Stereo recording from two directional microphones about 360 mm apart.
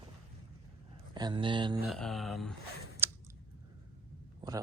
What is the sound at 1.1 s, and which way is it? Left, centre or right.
Speech, centre.